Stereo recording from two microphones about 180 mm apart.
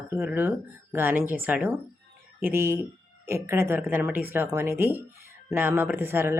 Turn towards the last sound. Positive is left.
turn(degrees=-15)  # may be behind; listen again after turning